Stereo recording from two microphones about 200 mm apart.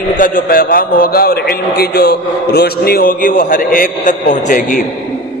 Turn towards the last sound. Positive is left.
turn(degrees=40)  # may be behind; listen again after turning